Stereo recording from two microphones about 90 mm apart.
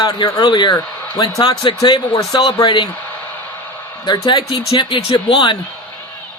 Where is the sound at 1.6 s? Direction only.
55° left (ahead or behind).